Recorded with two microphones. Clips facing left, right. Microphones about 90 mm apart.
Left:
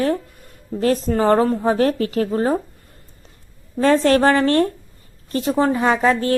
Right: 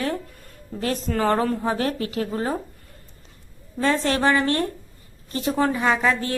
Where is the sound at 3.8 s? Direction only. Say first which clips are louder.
Left 7 dB; 40° left (ahead or behind).